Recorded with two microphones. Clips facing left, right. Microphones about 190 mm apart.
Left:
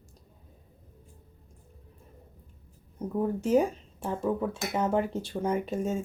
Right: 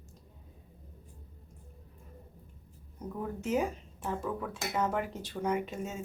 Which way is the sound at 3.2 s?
35° left (ahead or behind).